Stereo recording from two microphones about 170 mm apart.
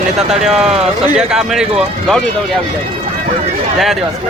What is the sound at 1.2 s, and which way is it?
Speech, 5° right (ahead or behind).